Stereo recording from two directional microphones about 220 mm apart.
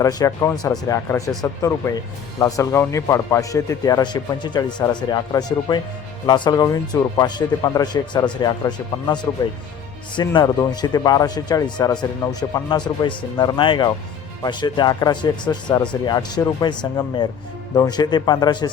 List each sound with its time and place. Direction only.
0.0 s speech: 15° left (ahead or behind)